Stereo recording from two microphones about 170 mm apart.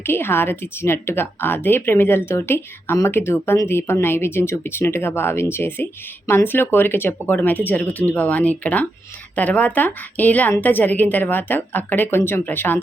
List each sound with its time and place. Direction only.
0.0 s speech: 15° left (ahead or behind)